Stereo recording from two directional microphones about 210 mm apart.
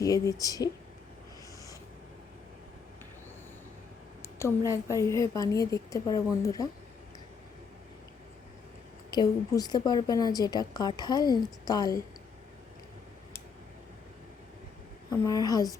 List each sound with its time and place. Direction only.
0.0 s speech: 15° left (ahead or behind)
4.2 s speech: 15° left (ahead or behind)
9.0 s a woman's voice: 20° left (ahead or behind)
15.1 s speech: 15° left (ahead or behind)